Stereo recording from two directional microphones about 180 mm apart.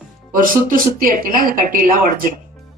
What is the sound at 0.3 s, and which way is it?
Speech, 50° right (ahead or behind).